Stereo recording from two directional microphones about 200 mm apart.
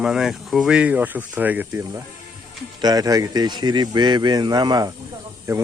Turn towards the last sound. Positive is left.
turn(degrees=-15)  # may be behind; listen again after turning